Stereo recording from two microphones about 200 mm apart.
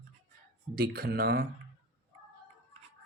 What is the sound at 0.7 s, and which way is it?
Speech, 50° right (ahead or behind).